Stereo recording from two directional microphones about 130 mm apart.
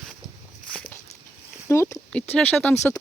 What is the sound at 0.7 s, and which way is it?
Walk, 10° left (ahead or behind).